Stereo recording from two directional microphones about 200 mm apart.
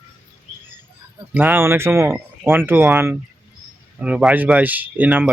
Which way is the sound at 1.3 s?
10° right (ahead or behind).